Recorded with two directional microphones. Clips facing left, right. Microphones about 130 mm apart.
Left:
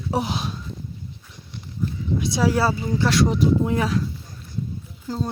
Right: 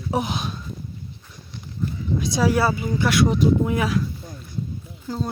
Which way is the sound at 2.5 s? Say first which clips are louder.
Even; 35° left (ahead or behind).